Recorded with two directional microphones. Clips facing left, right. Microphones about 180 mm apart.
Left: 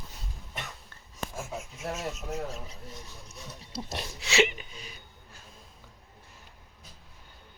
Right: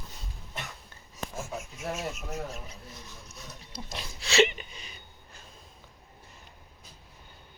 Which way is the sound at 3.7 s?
35° left (ahead or behind).